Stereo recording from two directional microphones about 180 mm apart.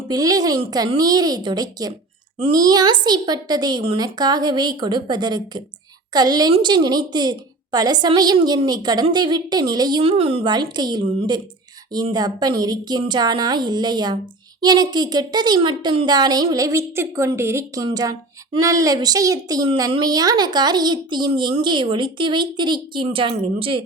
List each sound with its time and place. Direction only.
0.1 s a woman's voice: 20° right (ahead or behind)